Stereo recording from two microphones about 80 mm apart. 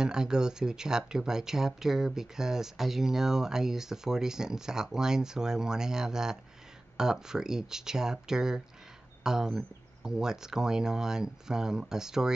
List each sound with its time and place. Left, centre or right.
0.0 s speech: centre